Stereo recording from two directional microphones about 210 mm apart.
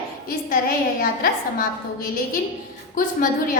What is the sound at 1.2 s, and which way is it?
A woman's voice, 45° left (ahead or behind).